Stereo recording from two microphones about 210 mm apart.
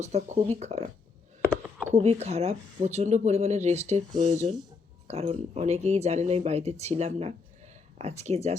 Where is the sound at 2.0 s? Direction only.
30° right (ahead or behind).